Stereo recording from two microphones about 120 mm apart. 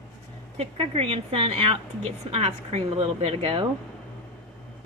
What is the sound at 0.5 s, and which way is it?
Speech, 55° right (ahead or behind).